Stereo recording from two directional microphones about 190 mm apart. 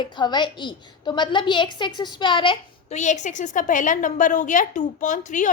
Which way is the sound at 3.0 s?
40° left (ahead or behind).